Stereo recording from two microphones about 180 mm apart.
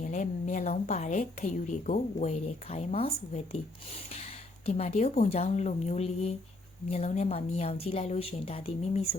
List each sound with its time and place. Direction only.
0.0 s a woman's voice: 45° left (ahead or behind)